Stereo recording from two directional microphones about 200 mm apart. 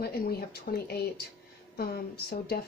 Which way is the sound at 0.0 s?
50° left (ahead or behind).